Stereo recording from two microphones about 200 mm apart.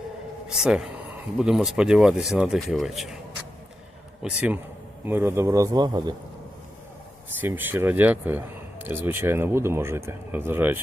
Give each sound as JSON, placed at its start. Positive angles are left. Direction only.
{"t": 0.4, "sound": "speech", "side_deg": -5}
{"t": 4.2, "sound": "speech", "side_deg": -5}
{"t": 7.4, "sound": "speech", "side_deg": -10}